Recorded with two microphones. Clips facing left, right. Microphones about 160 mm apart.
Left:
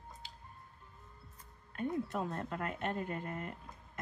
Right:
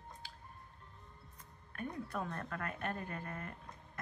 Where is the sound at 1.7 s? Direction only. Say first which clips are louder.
Left 6 dB; 20° left (ahead or behind).